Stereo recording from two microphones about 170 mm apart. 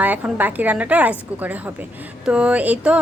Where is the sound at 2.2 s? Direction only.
5° right (ahead or behind).